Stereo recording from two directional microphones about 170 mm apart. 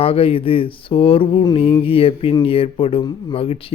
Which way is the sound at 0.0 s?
35° left (ahead or behind).